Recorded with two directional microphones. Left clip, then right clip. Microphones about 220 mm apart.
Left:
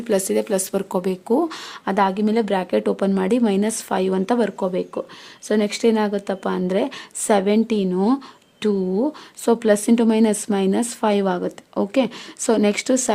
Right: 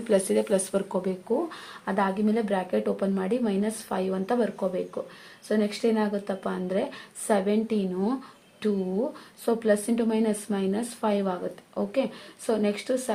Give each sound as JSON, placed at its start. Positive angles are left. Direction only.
{"t": 0.0, "sound": "speech", "side_deg": 25}
{"t": 1.0, "sound": "speech", "side_deg": 50}